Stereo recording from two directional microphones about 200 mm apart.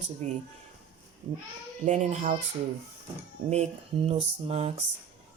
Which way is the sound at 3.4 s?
30° right (ahead or behind).